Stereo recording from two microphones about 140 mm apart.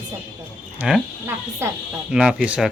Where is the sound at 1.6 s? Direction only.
20° right (ahead or behind).